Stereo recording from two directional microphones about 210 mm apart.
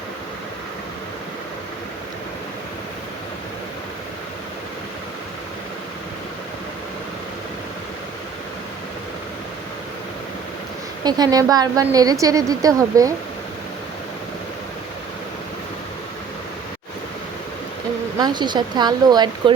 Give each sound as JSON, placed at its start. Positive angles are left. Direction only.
{"t": 11.0, "sound": "a woman's voice", "side_deg": -20}
{"t": 18.2, "sound": "speech", "side_deg": -20}